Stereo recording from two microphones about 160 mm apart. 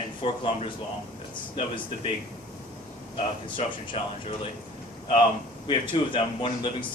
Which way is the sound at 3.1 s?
40° left (ahead or behind).